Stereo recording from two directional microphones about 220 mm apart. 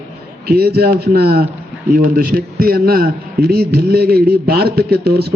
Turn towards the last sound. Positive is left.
turn(degrees=-45)  # may be behind; listen again after turning